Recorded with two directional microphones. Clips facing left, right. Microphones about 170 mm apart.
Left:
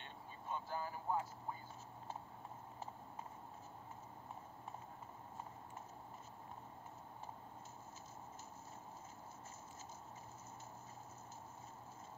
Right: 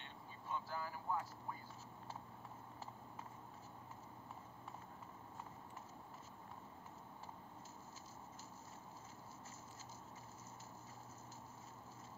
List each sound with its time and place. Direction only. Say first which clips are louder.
0.5 s speech: left 2 dB; 20° left (ahead or behind)